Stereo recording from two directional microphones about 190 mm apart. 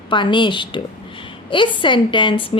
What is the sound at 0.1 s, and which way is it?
Speech, 25° left (ahead or behind).